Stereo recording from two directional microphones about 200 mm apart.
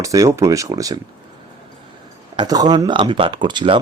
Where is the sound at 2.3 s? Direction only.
20° right (ahead or behind).